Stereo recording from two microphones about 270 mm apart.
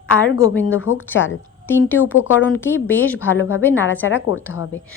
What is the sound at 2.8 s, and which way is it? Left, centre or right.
Speech, centre.